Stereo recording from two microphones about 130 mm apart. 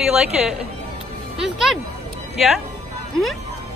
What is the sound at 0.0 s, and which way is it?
A woman's voice, 5° right (ahead or behind).